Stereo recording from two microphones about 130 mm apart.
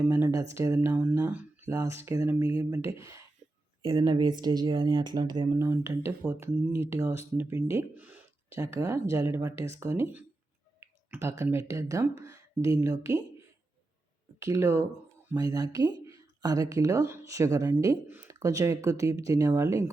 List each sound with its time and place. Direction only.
0.1 s speech: 20° right (ahead or behind)
5.5 s speech: 20° right (ahead or behind)
10.8 s a sound: 20° right (ahead or behind)
11.5 s speech: 25° right (ahead or behind)
14.3 s speech: 25° right (ahead or behind)